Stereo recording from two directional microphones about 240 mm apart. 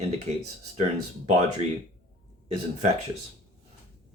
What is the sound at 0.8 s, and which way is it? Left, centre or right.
Speech, right.